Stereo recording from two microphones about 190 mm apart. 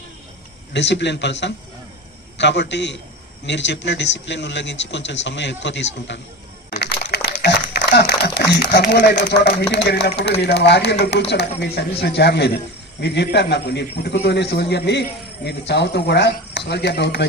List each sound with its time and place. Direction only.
0.7 s a man's voice: 65° left (ahead or behind)
6.7 s a sound: 55° left (ahead or behind)
9.0 s a man's voice: 60° left (ahead or behind)